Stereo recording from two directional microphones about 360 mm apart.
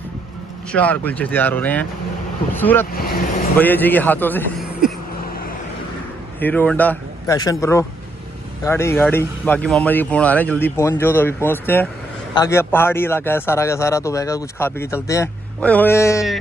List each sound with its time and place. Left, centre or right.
0.7 s speech: centre
2.9 s speech: left
3.5 s speech: centre
6.4 s a man's voice: centre